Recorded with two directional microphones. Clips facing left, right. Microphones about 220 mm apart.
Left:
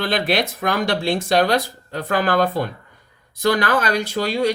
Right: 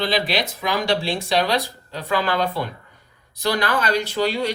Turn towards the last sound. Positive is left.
turn(degrees=45)  # may be behind; listen again after turning